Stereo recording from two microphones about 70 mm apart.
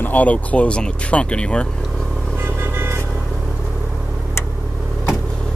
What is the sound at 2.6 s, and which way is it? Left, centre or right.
Vehicle, right.